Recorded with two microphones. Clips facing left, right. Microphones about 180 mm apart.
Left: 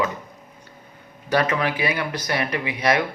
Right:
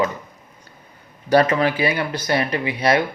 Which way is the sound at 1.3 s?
35° right (ahead or behind).